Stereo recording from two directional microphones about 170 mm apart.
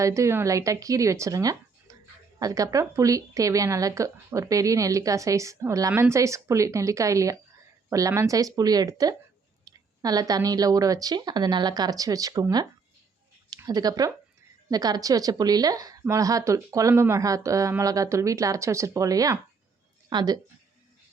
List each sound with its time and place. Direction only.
0.0 s a woman's voice: 15° right (ahead or behind)